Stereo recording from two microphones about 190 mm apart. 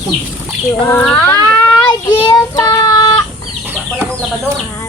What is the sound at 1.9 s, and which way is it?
Child singing, 20° left (ahead or behind).